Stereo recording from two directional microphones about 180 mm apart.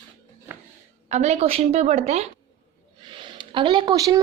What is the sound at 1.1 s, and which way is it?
A woman's voice, 40° right (ahead or behind).